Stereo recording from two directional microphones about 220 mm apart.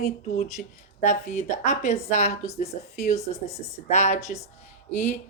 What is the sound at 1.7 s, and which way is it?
Speech, 30° left (ahead or behind).